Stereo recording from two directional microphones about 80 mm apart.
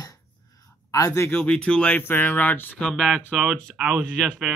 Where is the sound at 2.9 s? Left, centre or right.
Centre.